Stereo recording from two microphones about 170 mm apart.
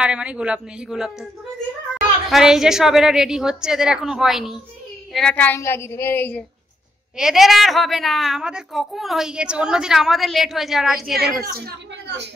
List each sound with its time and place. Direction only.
0.0 s a woman's voice: 5° right (ahead or behind); by 6.4 s 10° left (ahead or behind)
7.2 s a woman's voice: centre (ahead or behind)
11.4 s speech: 75° right (ahead or behind)